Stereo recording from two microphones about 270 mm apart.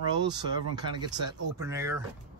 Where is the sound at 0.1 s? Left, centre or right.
Centre.